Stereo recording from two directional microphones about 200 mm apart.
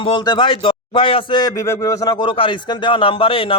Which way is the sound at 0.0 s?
25° left (ahead or behind).